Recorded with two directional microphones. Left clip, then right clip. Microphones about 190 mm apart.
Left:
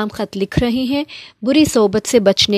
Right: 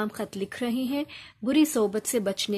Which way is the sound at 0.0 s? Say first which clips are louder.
Left 10 dB; 45° left (ahead or behind).